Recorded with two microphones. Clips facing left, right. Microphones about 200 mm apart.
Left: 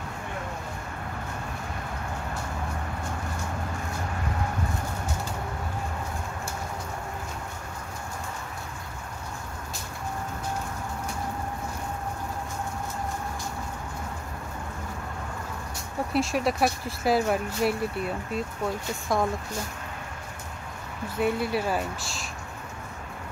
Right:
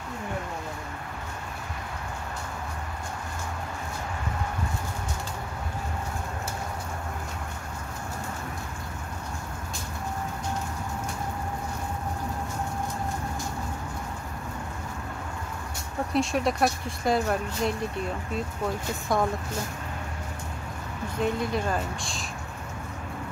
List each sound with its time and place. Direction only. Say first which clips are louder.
16.1 s speech: even; centre (ahead or behind)
21.2 s speech: left 1 dB; 5° left (ahead or behind)